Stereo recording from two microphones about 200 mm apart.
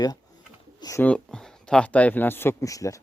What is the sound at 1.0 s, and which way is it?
Speech, 5° left (ahead or behind).